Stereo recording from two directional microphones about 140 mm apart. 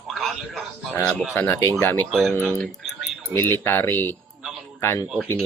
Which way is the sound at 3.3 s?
15° left (ahead or behind).